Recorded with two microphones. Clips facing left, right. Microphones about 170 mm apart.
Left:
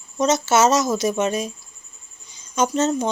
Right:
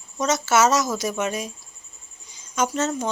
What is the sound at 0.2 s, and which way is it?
Speech, 25° left (ahead or behind).